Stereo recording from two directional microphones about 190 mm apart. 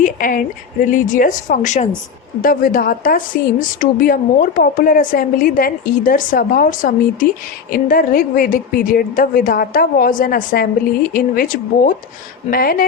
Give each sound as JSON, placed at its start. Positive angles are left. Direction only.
{"t": 0.0, "sound": "a woman's voice", "side_deg": 45}